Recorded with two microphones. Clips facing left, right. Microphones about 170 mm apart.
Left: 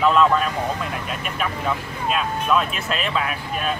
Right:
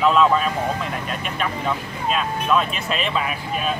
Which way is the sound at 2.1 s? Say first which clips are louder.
Even; centre (ahead or behind).